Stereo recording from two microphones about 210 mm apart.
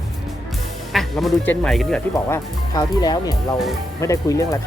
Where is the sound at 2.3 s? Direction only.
15° left (ahead or behind).